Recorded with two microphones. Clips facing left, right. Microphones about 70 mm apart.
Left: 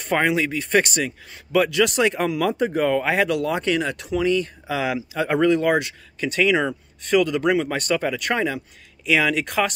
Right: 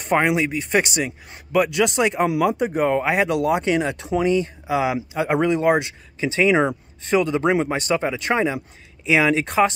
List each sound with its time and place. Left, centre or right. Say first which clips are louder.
0.1 s speech: right 2 dB; centre
7.7 s speech: right 1 dB; centre